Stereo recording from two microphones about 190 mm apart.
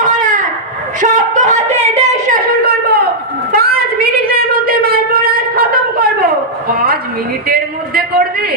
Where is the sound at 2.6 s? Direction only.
55° right (ahead or behind).